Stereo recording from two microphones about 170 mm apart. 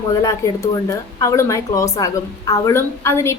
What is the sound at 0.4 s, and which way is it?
A woman's voice, 15° left (ahead or behind).